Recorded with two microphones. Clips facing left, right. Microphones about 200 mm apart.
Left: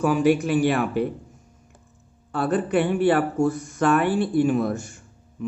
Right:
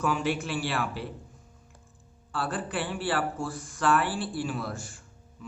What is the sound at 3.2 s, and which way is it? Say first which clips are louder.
Speech: left 10 dB; 45° left (ahead or behind).